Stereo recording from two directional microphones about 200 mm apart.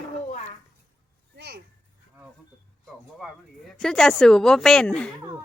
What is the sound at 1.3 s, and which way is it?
Speech, 50° right (ahead or behind).